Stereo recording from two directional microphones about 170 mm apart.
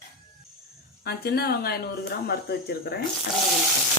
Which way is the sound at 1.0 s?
70° left (ahead or behind).